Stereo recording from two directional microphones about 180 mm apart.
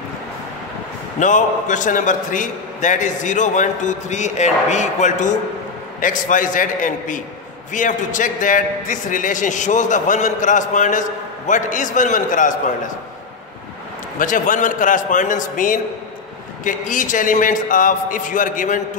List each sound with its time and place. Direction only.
1.2 s a man's voice: 45° left (ahead or behind)
14.1 s a man's voice: 45° left (ahead or behind)